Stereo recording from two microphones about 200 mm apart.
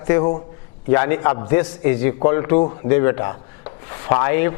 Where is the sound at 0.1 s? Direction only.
20° left (ahead or behind).